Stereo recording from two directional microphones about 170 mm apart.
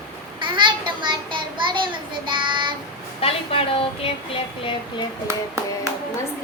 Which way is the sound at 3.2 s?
35° left (ahead or behind).